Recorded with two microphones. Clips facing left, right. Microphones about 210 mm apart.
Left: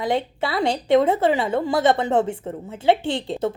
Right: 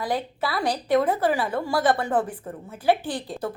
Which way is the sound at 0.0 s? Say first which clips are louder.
Left 4 dB; 25° left (ahead or behind).